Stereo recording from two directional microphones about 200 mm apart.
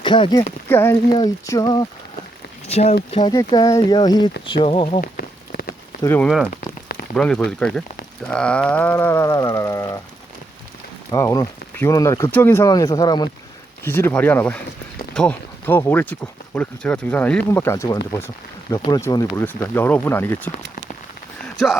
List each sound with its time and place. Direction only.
0.0 s speech: 25° left (ahead or behind)
0.7 s speech: 10° left (ahead or behind)
2.6 s speech: 30° left (ahead or behind)
3.2 s speech: 20° left (ahead or behind)
4.9 s a sound: 50° left (ahead or behind)
6.0 s speech: 10° left (ahead or behind)
6.5 s a sound: 45° left (ahead or behind)
7.2 s speech: 5° left (ahead or behind)
11.1 s speech: 20° left (ahead or behind)